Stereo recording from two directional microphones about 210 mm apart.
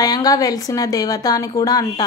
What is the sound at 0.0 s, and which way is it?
A woman's voice, 15° left (ahead or behind).